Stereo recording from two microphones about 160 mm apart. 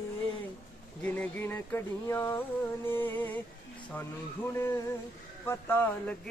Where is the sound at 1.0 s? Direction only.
10° left (ahead or behind).